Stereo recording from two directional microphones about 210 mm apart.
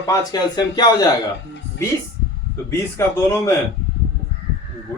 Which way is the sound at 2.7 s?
15° left (ahead or behind).